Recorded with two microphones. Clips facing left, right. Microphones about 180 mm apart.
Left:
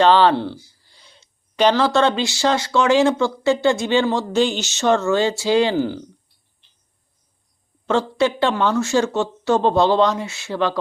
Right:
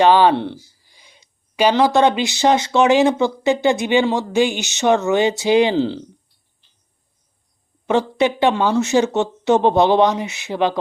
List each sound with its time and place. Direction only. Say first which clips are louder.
0.0 s speech: right 1 dB; 15° right (ahead or behind)
7.9 s speech: right 1 dB; 15° right (ahead or behind)